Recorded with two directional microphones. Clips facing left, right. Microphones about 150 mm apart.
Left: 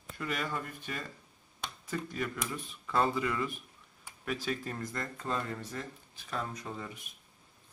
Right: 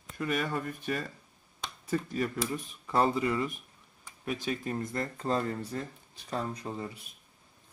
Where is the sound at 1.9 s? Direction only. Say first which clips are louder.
Right 5 dB; 35° right (ahead or behind).